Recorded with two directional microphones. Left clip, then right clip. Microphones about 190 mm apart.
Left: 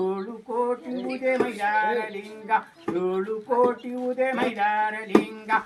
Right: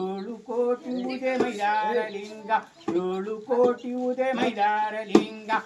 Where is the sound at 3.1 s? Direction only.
20° right (ahead or behind).